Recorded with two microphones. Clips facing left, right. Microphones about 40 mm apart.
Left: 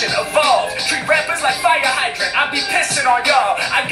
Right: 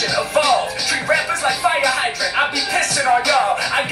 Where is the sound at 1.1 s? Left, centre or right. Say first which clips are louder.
Left 2 dB; left.